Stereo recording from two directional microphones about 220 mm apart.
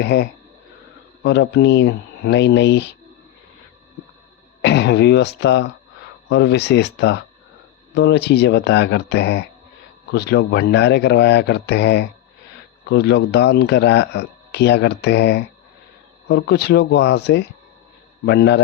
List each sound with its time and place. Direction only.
0.0 s speech: 50° left (ahead or behind)
4.6 s speech: 50° left (ahead or behind)